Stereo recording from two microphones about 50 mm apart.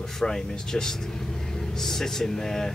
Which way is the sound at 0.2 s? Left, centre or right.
Centre.